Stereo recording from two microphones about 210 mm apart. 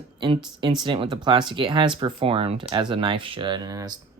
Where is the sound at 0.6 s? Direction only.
20° right (ahead or behind).